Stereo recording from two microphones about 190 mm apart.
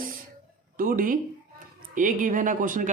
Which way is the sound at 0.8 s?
45° right (ahead or behind).